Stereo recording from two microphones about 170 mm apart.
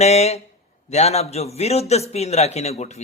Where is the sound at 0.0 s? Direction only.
40° left (ahead or behind).